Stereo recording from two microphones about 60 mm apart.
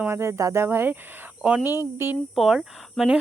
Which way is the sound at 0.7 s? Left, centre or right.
Right.